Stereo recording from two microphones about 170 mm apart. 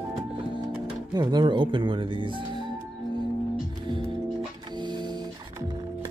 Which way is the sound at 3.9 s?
25° right (ahead or behind).